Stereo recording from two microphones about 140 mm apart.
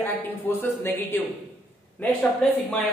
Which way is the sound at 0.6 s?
15° left (ahead or behind).